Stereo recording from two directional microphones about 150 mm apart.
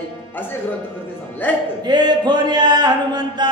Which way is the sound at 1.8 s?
30° right (ahead or behind).